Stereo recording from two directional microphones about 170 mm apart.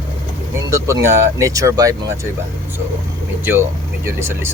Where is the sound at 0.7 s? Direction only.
20° right (ahead or behind).